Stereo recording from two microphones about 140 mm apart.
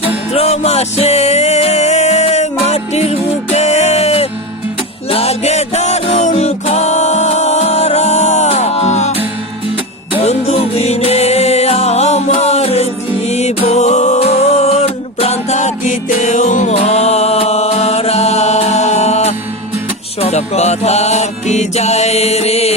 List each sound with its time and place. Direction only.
0.3 s music: 50° left (ahead or behind)
10.2 s music: 45° left (ahead or behind)